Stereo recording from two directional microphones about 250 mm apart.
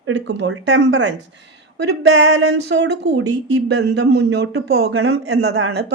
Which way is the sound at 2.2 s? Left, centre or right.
Right.